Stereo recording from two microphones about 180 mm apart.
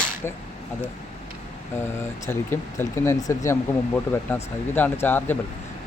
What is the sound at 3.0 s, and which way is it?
Speech, 15° left (ahead or behind).